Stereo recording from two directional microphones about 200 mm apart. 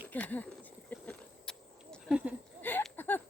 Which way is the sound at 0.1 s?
10° left (ahead or behind).